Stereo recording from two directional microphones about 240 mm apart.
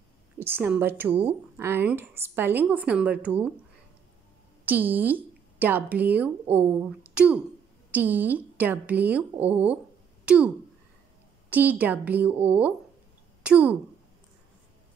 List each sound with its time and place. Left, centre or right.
0.4 s speech: centre
4.6 s speech: centre
11.5 s speech: centre